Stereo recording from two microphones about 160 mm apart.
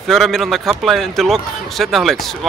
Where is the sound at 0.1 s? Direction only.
Centre (ahead or behind).